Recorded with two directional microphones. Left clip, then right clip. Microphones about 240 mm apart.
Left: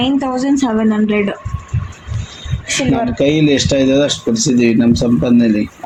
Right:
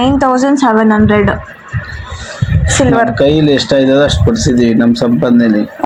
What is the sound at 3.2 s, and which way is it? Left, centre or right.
Speech, centre.